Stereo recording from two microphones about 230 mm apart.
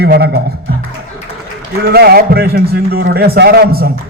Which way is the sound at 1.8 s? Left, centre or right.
Right.